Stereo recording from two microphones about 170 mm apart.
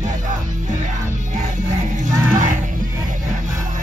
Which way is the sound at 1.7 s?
50° right (ahead or behind).